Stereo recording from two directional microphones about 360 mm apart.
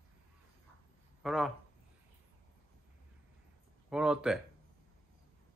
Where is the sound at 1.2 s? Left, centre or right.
Centre.